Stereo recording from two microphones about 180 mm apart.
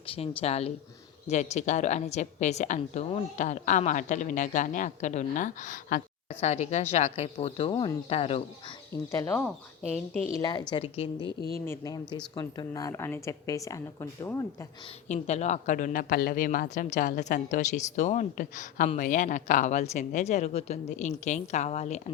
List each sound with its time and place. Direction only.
0.1 s a woman's voice: 30° left (ahead or behind)
8.9 s a woman's voice: 15° left (ahead or behind); by 11.3 s 30° left (ahead or behind)
11.6 s speech: 15° left (ahead or behind)
15.0 s a woman's voice: 40° left (ahead or behind)